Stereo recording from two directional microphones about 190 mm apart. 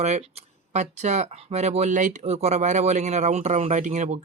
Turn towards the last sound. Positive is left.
turn(degrees=-40)  # may be behind; listen again after turning